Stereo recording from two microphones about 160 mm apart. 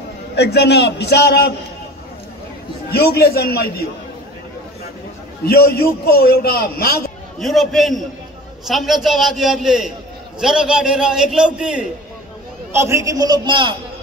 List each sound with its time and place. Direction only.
0.4 s a man's voice: 90° left
2.9 s a man's voice: 75° left (ahead or behind)
5.4 s a man's voice: 75° left (ahead or behind)
7.3 s a man's voice: centre (ahead or behind)
12.7 s a man's voice: 20° right (ahead or behind)